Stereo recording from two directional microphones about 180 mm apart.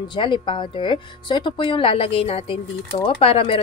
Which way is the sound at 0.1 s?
25° left (ahead or behind).